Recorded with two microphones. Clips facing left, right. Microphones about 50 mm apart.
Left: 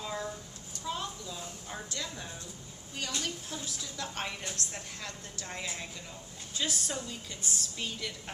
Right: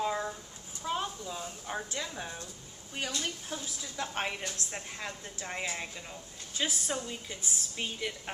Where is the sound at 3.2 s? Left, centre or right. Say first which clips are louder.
Right 1 dB; right.